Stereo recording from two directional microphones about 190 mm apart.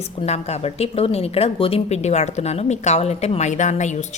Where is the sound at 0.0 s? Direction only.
35° left (ahead or behind).